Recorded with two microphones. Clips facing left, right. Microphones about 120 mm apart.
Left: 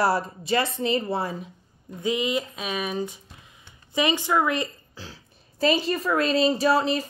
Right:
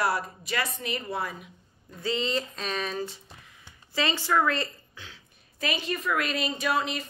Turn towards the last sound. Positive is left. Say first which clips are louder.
# left 7 dB
turn(degrees=35)  # may be behind; listen again after turning